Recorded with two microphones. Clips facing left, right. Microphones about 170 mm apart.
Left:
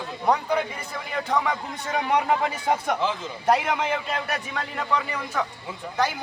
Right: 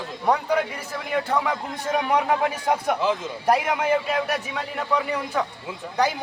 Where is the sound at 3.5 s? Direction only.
10° right (ahead or behind).